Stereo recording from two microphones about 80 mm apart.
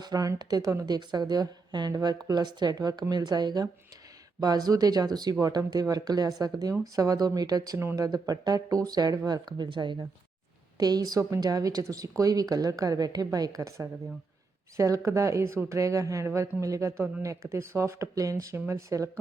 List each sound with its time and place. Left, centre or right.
0.0 s a woman's voice: right
0.9 s speech: right
1.9 s a woman's voice: right
2.2 s a woman's voice: right
10.8 s a woman's voice: right